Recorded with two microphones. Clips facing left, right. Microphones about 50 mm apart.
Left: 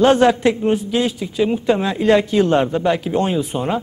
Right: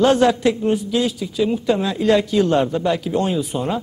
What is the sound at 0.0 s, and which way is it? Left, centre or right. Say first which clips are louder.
A man's voice: left 2 dB; left.